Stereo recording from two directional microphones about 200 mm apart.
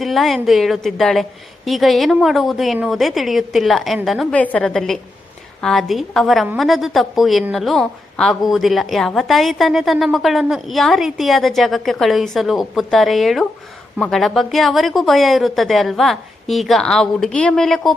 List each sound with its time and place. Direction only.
0.0 s a woman's voice: centre (ahead or behind)